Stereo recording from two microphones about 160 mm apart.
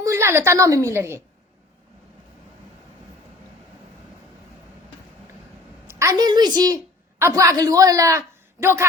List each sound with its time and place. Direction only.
0.0 s a woman's voice: 20° right (ahead or behind)
5.9 s a woman's voice: 20° right (ahead or behind)